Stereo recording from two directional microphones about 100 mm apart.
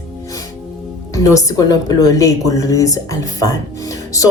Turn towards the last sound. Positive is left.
turn(degrees=35)  # may be behind; listen again after turning